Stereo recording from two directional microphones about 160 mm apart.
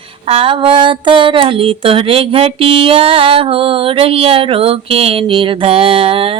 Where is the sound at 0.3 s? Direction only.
35° right (ahead or behind).